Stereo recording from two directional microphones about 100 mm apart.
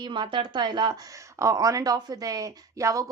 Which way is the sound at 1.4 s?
35° right (ahead or behind).